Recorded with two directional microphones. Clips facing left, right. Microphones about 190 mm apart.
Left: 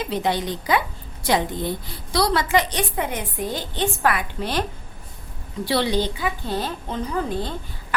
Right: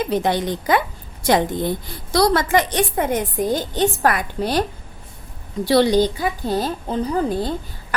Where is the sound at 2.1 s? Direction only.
45° right (ahead or behind).